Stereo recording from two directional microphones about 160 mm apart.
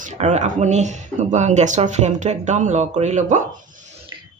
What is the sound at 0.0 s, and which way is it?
Speech, 45° right (ahead or behind).